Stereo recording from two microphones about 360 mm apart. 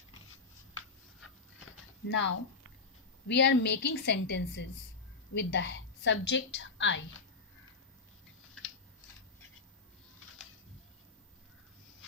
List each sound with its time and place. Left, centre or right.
2.0 s a woman's voice: left